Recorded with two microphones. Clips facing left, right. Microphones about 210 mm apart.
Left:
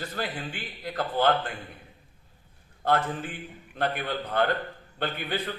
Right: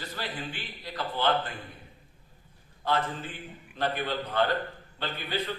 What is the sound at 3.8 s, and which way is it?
A man's voice, 55° left (ahead or behind).